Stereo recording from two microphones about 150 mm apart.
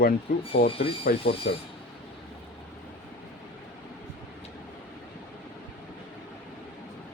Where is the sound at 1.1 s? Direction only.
80° left.